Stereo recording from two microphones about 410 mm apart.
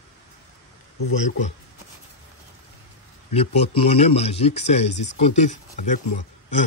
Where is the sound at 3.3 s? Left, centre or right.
Centre.